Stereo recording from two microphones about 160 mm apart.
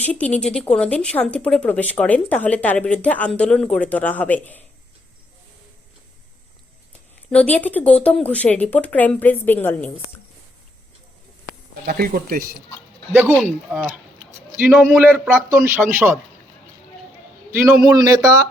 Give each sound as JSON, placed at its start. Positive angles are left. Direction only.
{"t": 0.0, "sound": "speech", "side_deg": 10}
{"t": 7.3, "sound": "speech", "side_deg": 10}
{"t": 11.9, "sound": "speech", "side_deg": -65}
{"t": 13.2, "sound": "speech", "side_deg": -15}
{"t": 15.0, "sound": "speech", "side_deg": -15}
{"t": 17.9, "sound": "speech", "side_deg": -20}